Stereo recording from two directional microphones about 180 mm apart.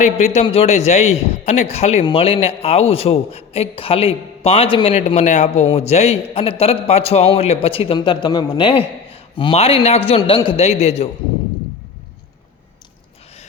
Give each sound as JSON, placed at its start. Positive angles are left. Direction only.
{"t": 0.0, "sound": "a man's voice", "side_deg": 40}